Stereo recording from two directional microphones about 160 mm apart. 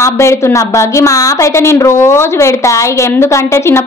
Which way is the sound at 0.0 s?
20° left (ahead or behind).